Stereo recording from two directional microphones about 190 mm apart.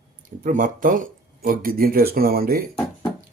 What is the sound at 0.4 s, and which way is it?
Speech, 45° right (ahead or behind).